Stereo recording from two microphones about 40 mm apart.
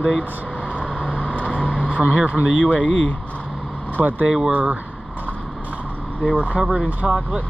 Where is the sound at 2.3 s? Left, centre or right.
Left.